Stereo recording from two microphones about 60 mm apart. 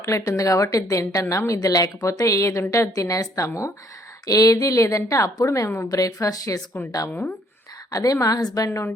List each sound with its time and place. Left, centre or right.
0.0 s a woman's voice: left
2.9 s a woman's voice: left
4.3 s a woman's voice: left
5.9 s a woman's voice: left
7.9 s a woman's voice: left